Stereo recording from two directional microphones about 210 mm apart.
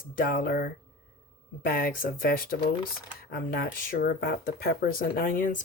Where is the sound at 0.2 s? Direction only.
45° left (ahead or behind).